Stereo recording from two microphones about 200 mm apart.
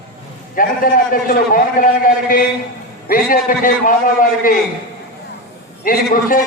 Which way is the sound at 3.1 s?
45° left (ahead or behind).